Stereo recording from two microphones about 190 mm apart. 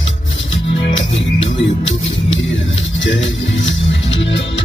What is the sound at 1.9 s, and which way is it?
Music, 80° left.